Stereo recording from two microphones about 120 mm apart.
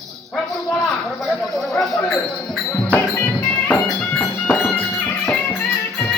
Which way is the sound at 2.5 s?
10° left (ahead or behind).